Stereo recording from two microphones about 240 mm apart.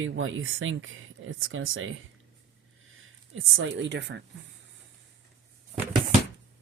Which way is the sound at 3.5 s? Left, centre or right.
Right.